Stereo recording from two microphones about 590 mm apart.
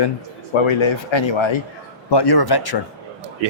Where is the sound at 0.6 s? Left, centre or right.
Left.